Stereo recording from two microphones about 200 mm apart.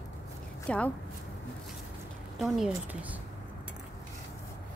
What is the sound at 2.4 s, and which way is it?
Speech, centre (ahead or behind).